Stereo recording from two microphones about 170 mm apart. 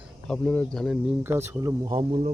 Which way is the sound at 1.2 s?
15° right (ahead or behind).